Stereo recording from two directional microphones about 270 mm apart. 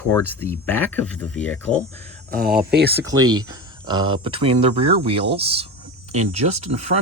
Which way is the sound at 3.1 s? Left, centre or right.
Centre.